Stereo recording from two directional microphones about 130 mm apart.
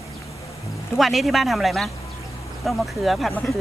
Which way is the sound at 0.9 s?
Centre (ahead or behind).